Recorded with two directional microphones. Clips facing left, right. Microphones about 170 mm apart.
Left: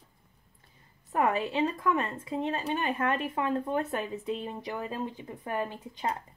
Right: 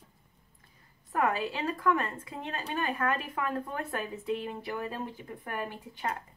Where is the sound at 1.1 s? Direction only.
20° left (ahead or behind).